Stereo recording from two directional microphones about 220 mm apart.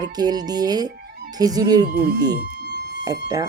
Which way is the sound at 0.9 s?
50° right (ahead or behind).